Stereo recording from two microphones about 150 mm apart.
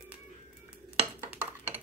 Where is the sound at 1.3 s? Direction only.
10° right (ahead or behind).